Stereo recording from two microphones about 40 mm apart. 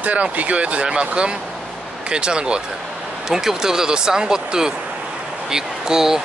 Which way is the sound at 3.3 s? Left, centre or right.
Centre.